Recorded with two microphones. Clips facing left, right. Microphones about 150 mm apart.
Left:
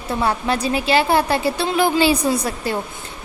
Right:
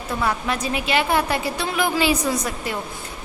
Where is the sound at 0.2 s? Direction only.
30° left (ahead or behind).